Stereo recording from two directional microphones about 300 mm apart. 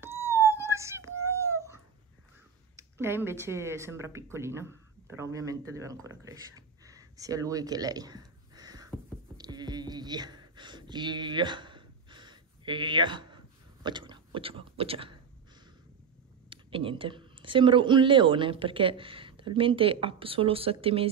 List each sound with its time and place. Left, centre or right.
0.0 s wail: centre
2.7 s speech: centre
9.4 s a sound: centre
13.8 s speech: centre
16.4 s a woman's voice: centre